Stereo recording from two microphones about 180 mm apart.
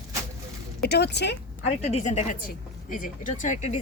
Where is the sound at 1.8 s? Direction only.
40° left (ahead or behind).